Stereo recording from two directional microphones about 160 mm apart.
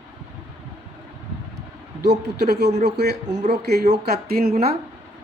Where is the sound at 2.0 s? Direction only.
90° right.